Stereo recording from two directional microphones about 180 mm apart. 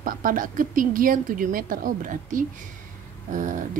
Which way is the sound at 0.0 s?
50° right (ahead or behind).